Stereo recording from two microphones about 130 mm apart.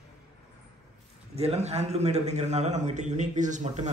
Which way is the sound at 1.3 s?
55° right (ahead or behind).